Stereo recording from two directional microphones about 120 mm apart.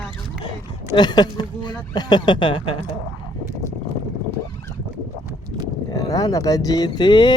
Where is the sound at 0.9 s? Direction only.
35° left (ahead or behind).